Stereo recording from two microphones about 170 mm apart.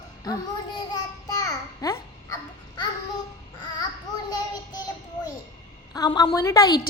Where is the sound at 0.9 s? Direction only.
20° left (ahead or behind).